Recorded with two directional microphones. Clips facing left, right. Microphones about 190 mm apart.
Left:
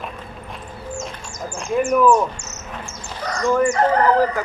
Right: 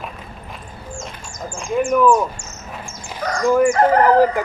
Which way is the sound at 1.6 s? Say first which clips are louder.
Right 1 dB; centre (ahead or behind).